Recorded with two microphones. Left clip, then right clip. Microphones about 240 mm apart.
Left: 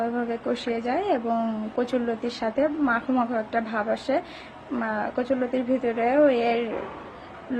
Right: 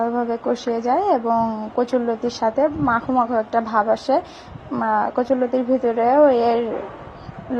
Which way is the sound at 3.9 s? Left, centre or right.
Centre.